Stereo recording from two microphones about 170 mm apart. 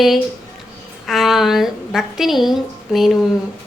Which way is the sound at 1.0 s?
Centre (ahead or behind).